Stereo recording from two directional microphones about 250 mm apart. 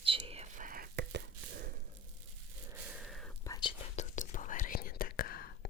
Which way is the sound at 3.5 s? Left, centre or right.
Centre.